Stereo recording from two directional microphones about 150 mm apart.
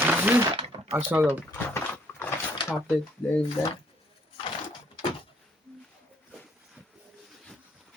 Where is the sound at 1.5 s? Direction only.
15° left (ahead or behind).